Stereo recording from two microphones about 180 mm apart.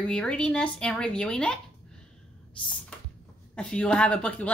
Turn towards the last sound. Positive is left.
turn(degrees=5)  # may be behind; listen again after turning